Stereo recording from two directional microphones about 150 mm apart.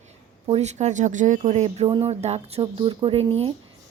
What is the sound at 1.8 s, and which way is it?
Speech, 30° right (ahead or behind).